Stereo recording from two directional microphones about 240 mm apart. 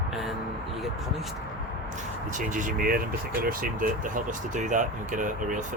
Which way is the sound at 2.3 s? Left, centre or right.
Right.